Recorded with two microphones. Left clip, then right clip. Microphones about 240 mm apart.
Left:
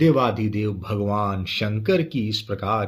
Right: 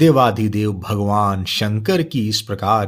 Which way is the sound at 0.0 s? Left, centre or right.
Right.